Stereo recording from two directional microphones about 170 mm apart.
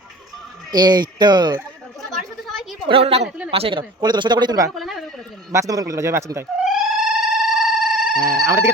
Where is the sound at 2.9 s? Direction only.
35° right (ahead or behind).